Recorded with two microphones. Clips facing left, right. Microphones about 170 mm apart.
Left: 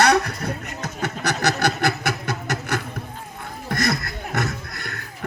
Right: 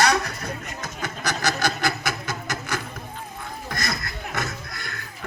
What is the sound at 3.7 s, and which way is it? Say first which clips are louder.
Chuckle: left 8 dB; 60° left (ahead or behind).